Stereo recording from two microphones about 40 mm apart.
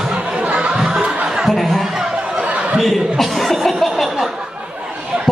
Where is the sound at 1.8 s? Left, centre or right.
Centre.